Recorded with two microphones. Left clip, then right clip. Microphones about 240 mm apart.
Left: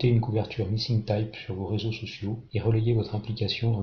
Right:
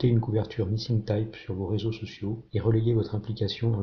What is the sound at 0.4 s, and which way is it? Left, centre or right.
Speech, right.